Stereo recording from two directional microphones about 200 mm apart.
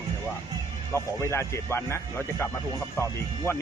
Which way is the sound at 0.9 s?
15° left (ahead or behind).